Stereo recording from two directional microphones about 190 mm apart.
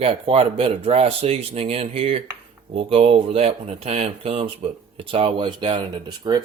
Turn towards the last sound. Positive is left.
turn(degrees=-20)  # may be behind; listen again after turning